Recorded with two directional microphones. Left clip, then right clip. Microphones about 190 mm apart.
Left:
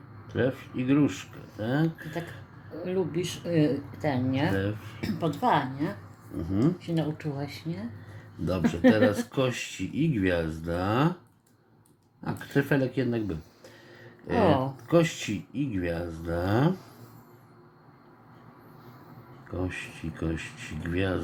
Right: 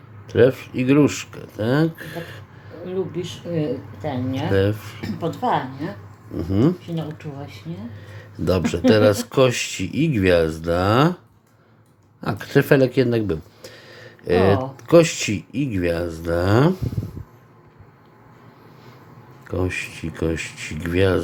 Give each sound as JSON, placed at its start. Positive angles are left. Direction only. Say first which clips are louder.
{"t": 0.3, "sound": "speech", "louder": "right 13 dB", "side_deg": -35}
{"t": 2.8, "sound": "speech", "louder": "right 3 dB", "side_deg": 35}
{"t": 4.5, "sound": "speech", "louder": "right 11 dB", "side_deg": -35}
{"t": 4.9, "sound": "a woman's voice", "louder": "right 4 dB", "side_deg": 20}
{"t": 6.4, "sound": "speech", "louder": "right 8 dB", "side_deg": -40}
{"t": 6.8, "sound": "speech", "louder": "even", "side_deg": 40}
{"t": 8.4, "sound": "speech", "louder": "right 6 dB", "side_deg": -40}
{"t": 12.2, "sound": "speech", "louder": "right 9 dB", "side_deg": -35}
{"t": 19.5, "sound": "speech", "louder": "right 9 dB", "side_deg": -35}